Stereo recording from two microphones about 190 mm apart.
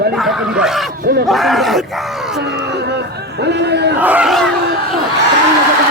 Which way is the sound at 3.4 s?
60° right (ahead or behind).